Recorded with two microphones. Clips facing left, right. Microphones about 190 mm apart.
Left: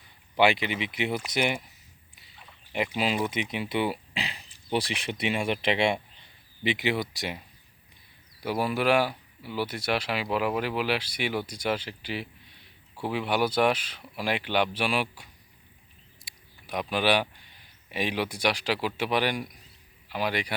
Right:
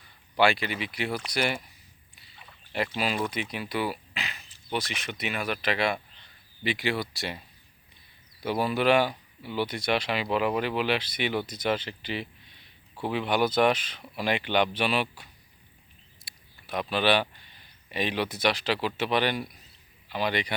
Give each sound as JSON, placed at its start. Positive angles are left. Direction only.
{"t": 0.3, "sound": "speech", "side_deg": 15}
{"t": 2.7, "sound": "speech", "side_deg": 15}
{"t": 16.2, "sound": "a sound", "side_deg": 15}
{"t": 17.9, "sound": "speech", "side_deg": 10}